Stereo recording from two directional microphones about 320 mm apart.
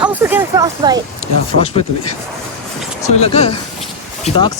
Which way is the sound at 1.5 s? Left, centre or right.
Right.